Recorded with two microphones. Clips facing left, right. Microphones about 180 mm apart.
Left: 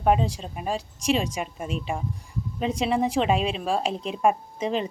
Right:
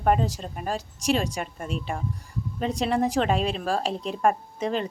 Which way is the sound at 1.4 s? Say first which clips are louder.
Left 1 dB; centre (ahead or behind).